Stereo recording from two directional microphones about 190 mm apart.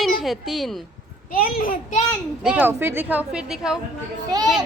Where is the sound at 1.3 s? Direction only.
50° left (ahead or behind).